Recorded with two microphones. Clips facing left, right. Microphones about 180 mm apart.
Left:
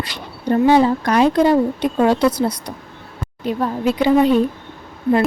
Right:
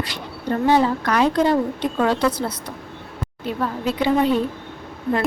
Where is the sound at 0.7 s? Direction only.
15° left (ahead or behind).